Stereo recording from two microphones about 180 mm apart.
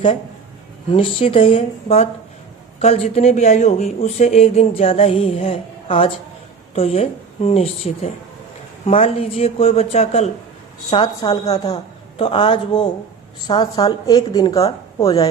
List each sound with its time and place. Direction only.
0.9 s speech: 30° left (ahead or behind)
10.9 s a woman's voice: 25° left (ahead or behind)
15.0 s speech: 30° left (ahead or behind)